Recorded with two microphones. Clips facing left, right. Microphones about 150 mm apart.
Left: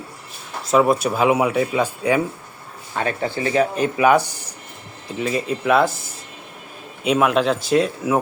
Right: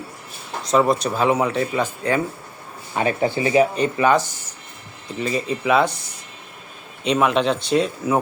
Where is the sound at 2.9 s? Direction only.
15° right (ahead or behind).